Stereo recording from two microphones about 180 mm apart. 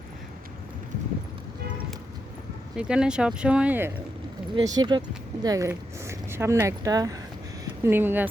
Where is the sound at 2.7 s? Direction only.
5° right (ahead or behind).